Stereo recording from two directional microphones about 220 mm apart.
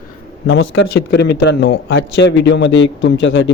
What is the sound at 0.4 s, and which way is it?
A man's voice, 60° left (ahead or behind).